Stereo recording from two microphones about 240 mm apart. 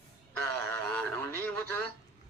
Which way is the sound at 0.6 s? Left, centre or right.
Centre.